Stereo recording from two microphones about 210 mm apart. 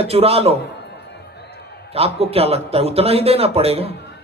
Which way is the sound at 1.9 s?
30° right (ahead or behind).